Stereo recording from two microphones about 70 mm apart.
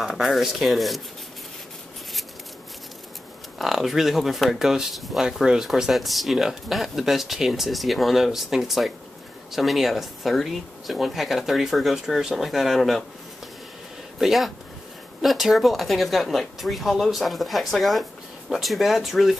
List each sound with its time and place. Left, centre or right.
0.0 s speech: centre
3.5 s speech: centre
14.2 s speech: centre